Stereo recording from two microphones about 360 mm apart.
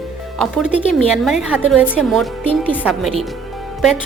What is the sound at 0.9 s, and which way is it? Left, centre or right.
A woman's voice, centre.